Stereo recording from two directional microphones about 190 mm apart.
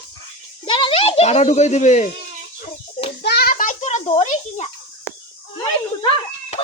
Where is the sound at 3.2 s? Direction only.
55° left (ahead or behind).